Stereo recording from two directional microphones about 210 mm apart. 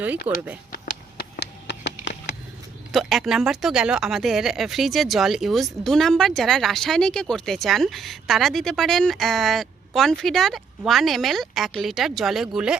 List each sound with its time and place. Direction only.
0.3 s speech: 5° right (ahead or behind)
1.4 s a sound: 55° left (ahead or behind)
2.9 s speech: centre (ahead or behind)